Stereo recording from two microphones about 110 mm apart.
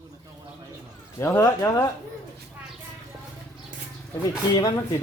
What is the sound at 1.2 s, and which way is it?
Speech, 25° left (ahead or behind).